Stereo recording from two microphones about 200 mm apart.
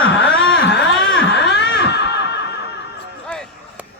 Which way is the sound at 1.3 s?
60° left (ahead or behind).